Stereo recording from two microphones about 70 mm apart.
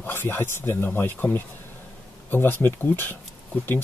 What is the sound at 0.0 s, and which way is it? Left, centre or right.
Speech, left.